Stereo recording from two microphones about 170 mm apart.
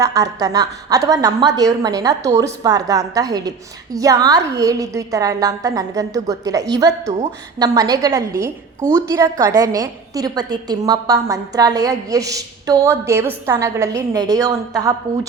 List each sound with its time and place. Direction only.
0.0 s a woman's voice: 20° right (ahead or behind)
7.0 s a woman's voice: 40° right (ahead or behind)
7.6 s a woman's voice: 20° right (ahead or behind)